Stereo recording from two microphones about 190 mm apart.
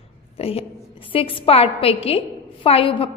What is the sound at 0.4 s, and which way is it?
A woman's voice, 30° left (ahead or behind).